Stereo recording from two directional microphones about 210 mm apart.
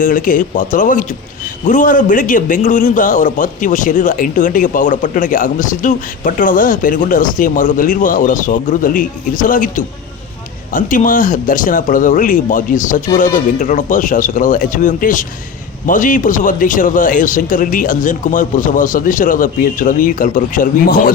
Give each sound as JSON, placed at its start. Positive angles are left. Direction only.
{"t": 0.0, "sound": "a man's voice", "side_deg": 40}